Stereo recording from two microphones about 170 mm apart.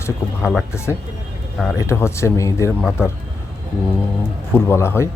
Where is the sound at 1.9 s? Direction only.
15° left (ahead or behind).